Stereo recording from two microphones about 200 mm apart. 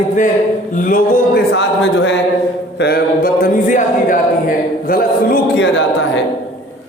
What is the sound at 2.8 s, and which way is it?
A man's voice, 50° left (ahead or behind).